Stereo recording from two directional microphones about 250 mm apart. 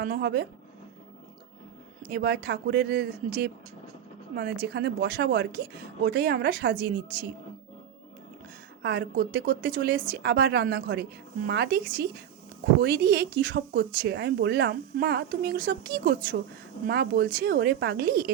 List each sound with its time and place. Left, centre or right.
0.0 s speech: right
2.0 s speech: right
4.6 s speech: right
8.8 s speech: right